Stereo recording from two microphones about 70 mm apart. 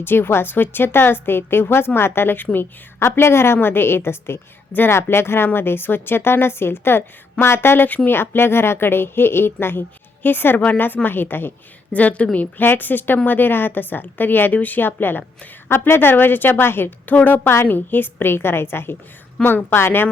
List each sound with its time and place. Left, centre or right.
0.0 s a woman's voice: left
11.9 s a woman's voice: left
17.4 s a woman's voice: left
17.7 s a woman's voice: left
19.7 s a woman's voice: left